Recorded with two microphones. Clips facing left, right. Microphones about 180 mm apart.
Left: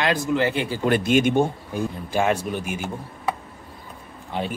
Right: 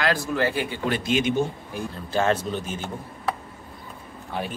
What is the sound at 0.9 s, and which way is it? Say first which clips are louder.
Speech: left 5 dB; 50° left (ahead or behind).